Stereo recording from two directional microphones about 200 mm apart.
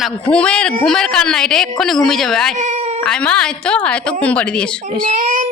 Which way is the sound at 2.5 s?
35° right (ahead or behind).